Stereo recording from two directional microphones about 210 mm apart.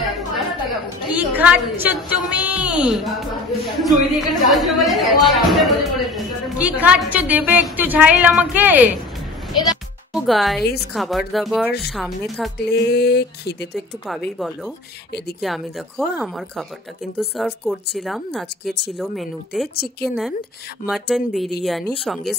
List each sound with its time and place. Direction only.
0.0 s a woman's voice: centre (ahead or behind)
10.1 s a woman's voice: centre (ahead or behind)
12.5 s music: 50° left (ahead or behind)
13.7 s a woman's voice: centre (ahead or behind)
17.2 s a woman's voice: centre (ahead or behind)
19.7 s music: 50° left (ahead or behind)
20.8 s a woman's voice: centre (ahead or behind)